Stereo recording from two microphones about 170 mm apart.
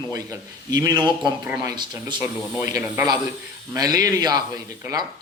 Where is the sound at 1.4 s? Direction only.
10° right (ahead or behind).